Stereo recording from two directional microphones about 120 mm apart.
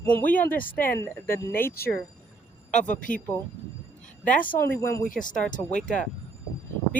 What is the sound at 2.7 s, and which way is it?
Speech, 90° left.